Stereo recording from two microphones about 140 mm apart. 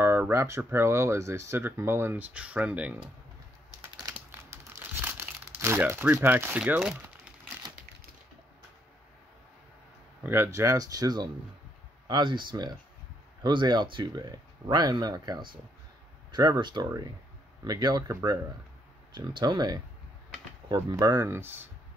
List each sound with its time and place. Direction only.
0.0 s speech: 20° right (ahead or behind)
4.1 s crumpling: 15° right (ahead or behind)
10.2 s speech: 15° right (ahead or behind)